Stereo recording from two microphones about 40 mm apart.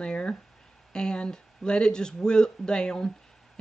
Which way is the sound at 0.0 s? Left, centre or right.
Left.